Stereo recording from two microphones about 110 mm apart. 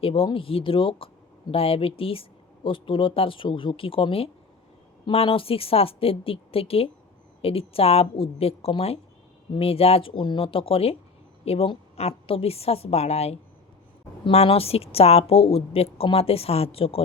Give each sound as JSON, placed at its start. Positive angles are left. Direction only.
{"t": 0.0, "sound": "a woman's voice", "side_deg": 60}
{"t": 14.3, "sound": "a woman's voice", "side_deg": 60}